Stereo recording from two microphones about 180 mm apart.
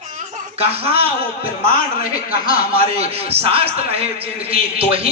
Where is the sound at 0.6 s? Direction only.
35° right (ahead or behind).